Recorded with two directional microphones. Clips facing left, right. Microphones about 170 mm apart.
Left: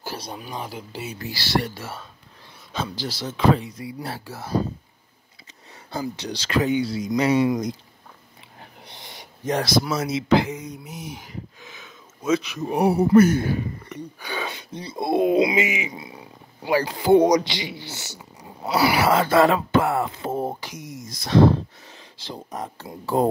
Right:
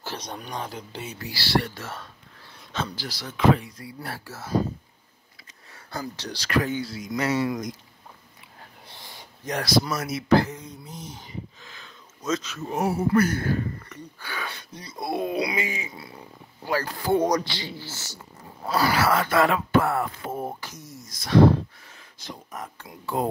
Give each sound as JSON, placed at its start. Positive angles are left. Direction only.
{"t": 0.3, "sound": "speech", "side_deg": 5}
{"t": 1.1, "sound": "speech", "side_deg": 20}
{"t": 3.0, "sound": "a man's voice", "side_deg": 25}
{"t": 5.9, "sound": "a man's voice", "side_deg": 15}
{"t": 8.8, "sound": "a sound", "side_deg": 20}
{"t": 9.9, "sound": "a man's voice", "side_deg": 25}
{"t": 10.5, "sound": "a sound", "side_deg": 80}
{"t": 10.9, "sound": "a man's voice", "side_deg": 10}
{"t": 15.6, "sound": "speech", "side_deg": 90}
{"t": 15.9, "sound": "a man's voice", "side_deg": 15}
{"t": 22.2, "sound": "speech", "side_deg": 30}